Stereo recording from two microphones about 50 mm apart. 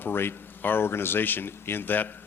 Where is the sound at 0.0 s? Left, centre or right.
Left.